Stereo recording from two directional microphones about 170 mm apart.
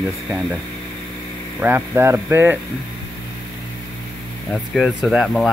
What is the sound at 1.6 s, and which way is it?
Speech, 15° right (ahead or behind).